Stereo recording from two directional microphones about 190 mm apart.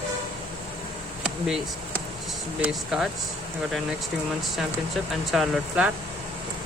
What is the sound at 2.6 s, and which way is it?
Speech, centre (ahead or behind).